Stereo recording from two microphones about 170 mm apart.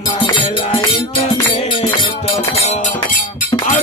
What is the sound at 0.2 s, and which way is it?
Music, 30° left (ahead or behind).